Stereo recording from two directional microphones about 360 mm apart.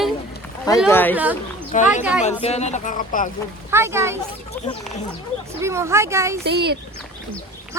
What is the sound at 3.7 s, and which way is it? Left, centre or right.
Speech, centre.